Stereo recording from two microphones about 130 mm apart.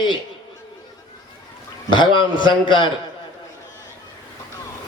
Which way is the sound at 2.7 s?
35° left (ahead or behind).